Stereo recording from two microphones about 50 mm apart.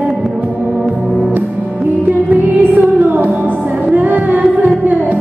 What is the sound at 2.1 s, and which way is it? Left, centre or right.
Music, right.